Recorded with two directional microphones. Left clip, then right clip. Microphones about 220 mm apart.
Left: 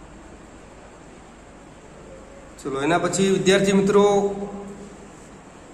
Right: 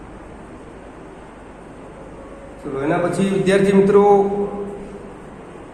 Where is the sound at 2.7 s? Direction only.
25° left (ahead or behind).